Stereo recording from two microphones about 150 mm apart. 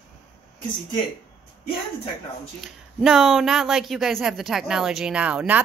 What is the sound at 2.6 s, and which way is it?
Speech, 5° right (ahead or behind).